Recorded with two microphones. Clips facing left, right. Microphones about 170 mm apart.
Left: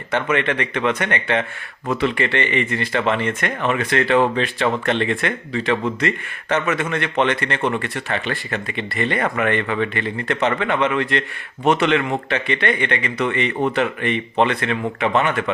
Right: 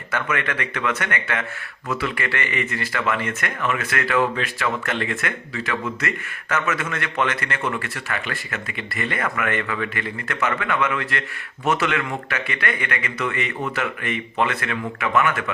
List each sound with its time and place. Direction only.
0.1 s speech: 25° left (ahead or behind)